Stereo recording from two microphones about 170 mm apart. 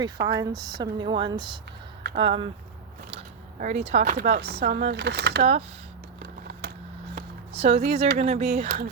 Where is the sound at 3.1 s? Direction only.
45° right (ahead or behind).